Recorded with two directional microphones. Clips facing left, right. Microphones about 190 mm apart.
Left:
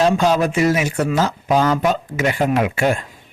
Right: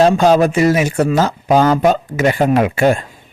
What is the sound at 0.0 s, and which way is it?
Speech, 40° right (ahead or behind).